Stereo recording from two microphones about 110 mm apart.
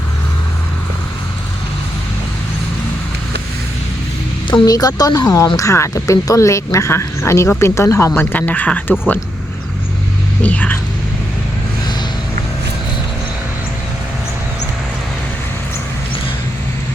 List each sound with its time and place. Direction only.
4.6 s speech: 35° left (ahead or behind); by 9.1 s 15° left (ahead or behind)
10.4 s speech: 15° left (ahead or behind)